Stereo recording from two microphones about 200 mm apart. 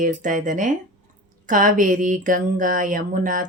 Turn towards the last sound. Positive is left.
turn(degrees=-40)  # may be behind; listen again after turning